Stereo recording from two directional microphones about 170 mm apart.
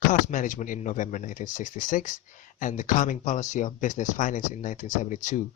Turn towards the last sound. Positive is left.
turn(degrees=45)  # may be behind; listen again after turning